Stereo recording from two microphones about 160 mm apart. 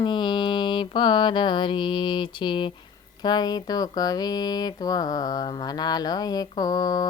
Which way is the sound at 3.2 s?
25° left (ahead or behind).